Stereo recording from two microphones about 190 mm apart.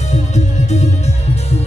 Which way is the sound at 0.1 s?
35° left (ahead or behind).